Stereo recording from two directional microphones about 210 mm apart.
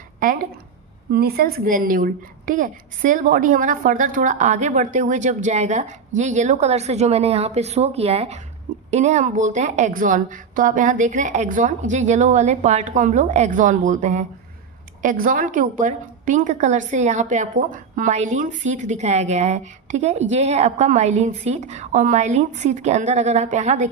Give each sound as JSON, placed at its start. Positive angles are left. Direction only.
{"t": 1.1, "sound": "a woman's voice", "side_deg": -45}